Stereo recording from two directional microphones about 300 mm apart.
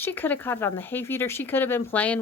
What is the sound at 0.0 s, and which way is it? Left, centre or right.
Speech, centre.